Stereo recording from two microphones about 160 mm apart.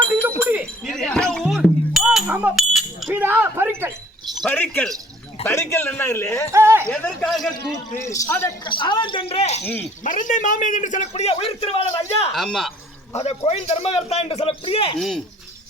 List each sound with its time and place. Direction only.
0.2 s a sound: 10° right (ahead or behind)
0.9 s music: 5° left (ahead or behind)
3.1 s a sound: 10° right (ahead or behind)
4.4 s a man's voice: 10° left (ahead or behind)
6.5 s speech: 15° right (ahead or behind)
6.9 s a man's voice: 10° left (ahead or behind)
8.1 s a man's voice: 15° left (ahead or behind)
8.6 s a man's voice: 30° left (ahead or behind)
9.8 s speech: 55° left (ahead or behind); by 12.3 s 35° left (ahead or behind)
12.3 s speech: centre (ahead or behind)
13.1 s a man's voice: 40° left (ahead or behind)
14.9 s speech: 5° left (ahead or behind)